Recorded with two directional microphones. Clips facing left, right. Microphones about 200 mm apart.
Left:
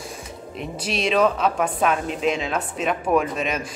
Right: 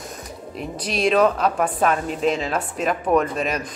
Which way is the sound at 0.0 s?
Centre (ahead or behind).